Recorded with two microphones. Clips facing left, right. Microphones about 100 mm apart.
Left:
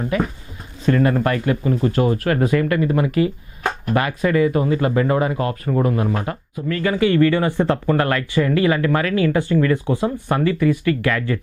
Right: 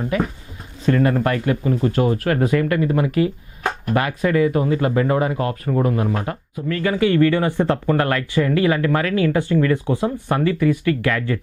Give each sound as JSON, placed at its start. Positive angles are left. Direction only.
{"t": 0.0, "sound": "speech", "side_deg": 20}
{"t": 10.4, "sound": "speech", "side_deg": 15}